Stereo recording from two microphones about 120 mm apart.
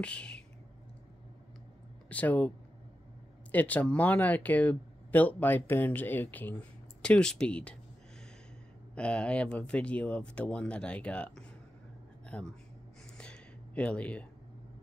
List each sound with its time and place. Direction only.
0.0 s speech: 10° left (ahead or behind)
2.0 s speech: 15° left (ahead or behind)
3.5 s speech: 10° left (ahead or behind)
8.9 s speech: 10° left (ahead or behind)
13.2 s a sound: 10° left (ahead or behind)